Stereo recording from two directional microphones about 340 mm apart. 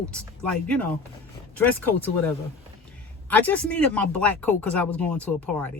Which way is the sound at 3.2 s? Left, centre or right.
Centre.